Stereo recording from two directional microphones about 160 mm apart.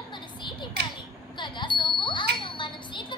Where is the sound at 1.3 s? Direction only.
30° left (ahead or behind).